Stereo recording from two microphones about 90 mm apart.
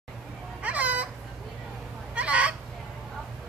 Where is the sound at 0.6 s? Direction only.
15° right (ahead or behind).